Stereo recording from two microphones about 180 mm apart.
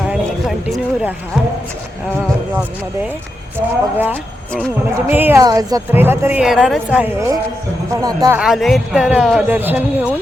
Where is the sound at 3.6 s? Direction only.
10° right (ahead or behind).